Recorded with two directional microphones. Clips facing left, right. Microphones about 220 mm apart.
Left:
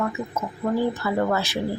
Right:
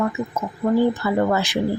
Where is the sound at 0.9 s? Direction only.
15° right (ahead or behind).